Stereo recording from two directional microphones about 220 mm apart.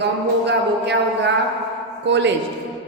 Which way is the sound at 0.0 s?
50° right (ahead or behind).